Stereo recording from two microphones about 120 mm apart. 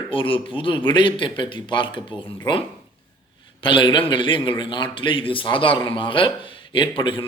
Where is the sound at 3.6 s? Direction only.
45° left (ahead or behind).